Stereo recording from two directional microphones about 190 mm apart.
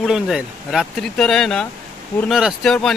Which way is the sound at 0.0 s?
5° right (ahead or behind).